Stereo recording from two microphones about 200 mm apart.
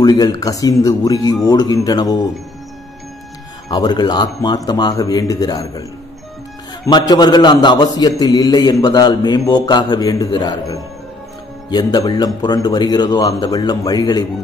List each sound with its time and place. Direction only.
0.0 s speech: 20° left (ahead or behind)
3.7 s speech: 20° left (ahead or behind)
6.9 s speech: 20° left (ahead or behind)